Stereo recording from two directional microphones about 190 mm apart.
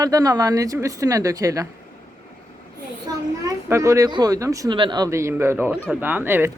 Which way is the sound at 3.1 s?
15° right (ahead or behind).